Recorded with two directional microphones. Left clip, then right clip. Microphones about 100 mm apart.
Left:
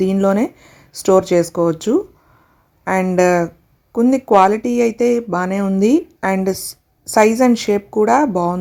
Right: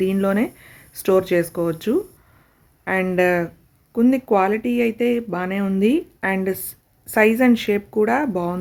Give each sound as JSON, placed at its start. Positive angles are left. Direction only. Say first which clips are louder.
{"t": 0.0, "sound": "speech", "louder": "left 4 dB", "side_deg": 30}
{"t": 3.2, "sound": "speech", "louder": "left 6 dB", "side_deg": 25}
{"t": 5.6, "sound": "speech", "louder": "left 1 dB", "side_deg": 15}
{"t": 5.9, "sound": "speech", "louder": "left 5 dB", "side_deg": 35}
{"t": 6.6, "sound": "a sound", "louder": "left 9 dB", "side_deg": -10}
{"t": 7.1, "sound": "speech", "louder": "left 4 dB", "side_deg": 30}